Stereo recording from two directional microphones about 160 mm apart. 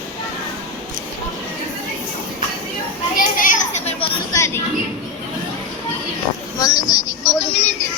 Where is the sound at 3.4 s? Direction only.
50° left (ahead or behind).